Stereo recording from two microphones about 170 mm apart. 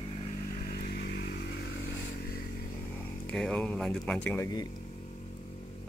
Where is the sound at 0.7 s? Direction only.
70° left (ahead or behind).